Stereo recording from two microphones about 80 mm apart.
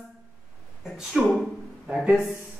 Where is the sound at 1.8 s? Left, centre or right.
Centre.